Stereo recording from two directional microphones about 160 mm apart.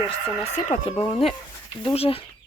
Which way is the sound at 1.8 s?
35° left (ahead or behind).